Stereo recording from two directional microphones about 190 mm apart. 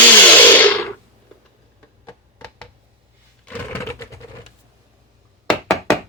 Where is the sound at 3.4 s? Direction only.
10° left (ahead or behind).